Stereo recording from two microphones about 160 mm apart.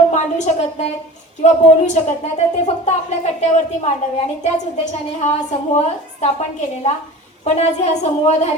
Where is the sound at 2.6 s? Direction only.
45° left (ahead or behind).